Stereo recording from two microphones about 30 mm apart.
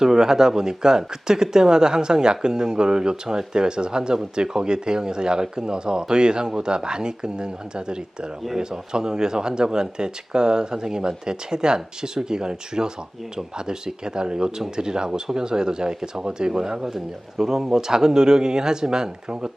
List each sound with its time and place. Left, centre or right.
0.0 s speech: centre